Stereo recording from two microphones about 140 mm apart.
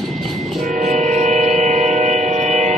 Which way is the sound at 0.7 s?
60° right (ahead or behind).